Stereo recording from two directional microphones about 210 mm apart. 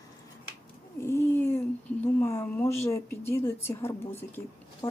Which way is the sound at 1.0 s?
10° left (ahead or behind).